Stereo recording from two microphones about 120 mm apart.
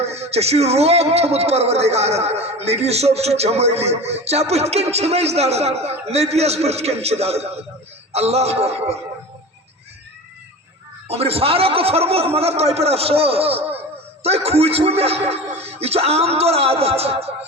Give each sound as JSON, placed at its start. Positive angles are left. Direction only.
{"t": 0.0, "sound": "a man's voice", "side_deg": -60}
{"t": 11.1, "sound": "a man's voice", "side_deg": -55}